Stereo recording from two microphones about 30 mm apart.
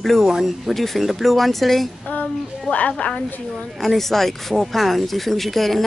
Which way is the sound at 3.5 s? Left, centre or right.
Centre.